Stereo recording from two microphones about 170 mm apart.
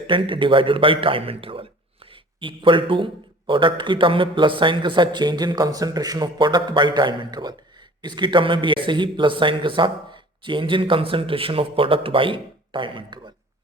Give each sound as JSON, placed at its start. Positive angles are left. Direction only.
{"t": 0.1, "sound": "a man's voice", "side_deg": -30}